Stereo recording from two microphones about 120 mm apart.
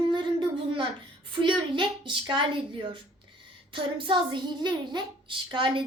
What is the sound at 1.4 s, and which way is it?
A woman's voice, 40° right (ahead or behind).